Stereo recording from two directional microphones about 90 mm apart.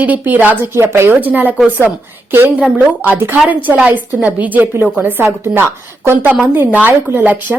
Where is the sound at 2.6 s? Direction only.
15° right (ahead or behind).